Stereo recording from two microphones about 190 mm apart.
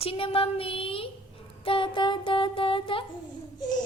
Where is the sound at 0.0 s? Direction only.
30° left (ahead or behind).